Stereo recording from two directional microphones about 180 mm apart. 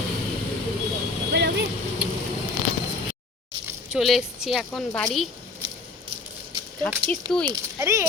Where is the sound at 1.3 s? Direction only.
70° right (ahead or behind).